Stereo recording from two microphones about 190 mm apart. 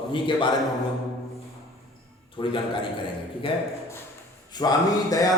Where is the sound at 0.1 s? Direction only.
25° left (ahead or behind).